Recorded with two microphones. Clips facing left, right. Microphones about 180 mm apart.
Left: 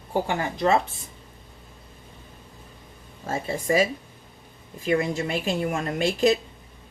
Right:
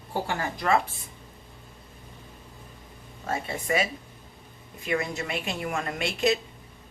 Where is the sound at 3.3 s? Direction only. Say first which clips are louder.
Left 4 dB; 30° left (ahead or behind).